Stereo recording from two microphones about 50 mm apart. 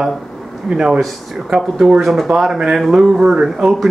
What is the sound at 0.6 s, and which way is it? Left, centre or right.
Speech, centre.